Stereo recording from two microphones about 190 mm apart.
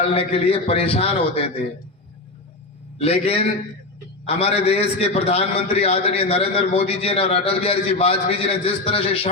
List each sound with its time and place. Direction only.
0.1 s a man's voice: 30° left (ahead or behind)
3.0 s a man's voice: 30° left (ahead or behind)